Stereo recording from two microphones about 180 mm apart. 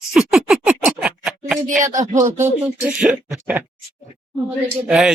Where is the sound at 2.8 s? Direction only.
5° right (ahead or behind).